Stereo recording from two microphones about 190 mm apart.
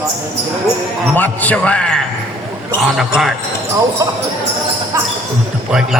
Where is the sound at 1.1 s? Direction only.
10° left (ahead or behind).